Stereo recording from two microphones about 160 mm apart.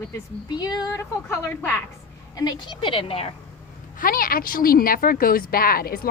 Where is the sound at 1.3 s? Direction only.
15° left (ahead or behind).